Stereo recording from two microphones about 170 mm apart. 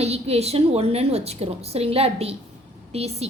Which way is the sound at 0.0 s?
35° right (ahead or behind).